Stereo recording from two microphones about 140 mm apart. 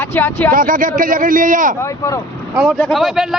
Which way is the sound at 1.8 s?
25° left (ahead or behind).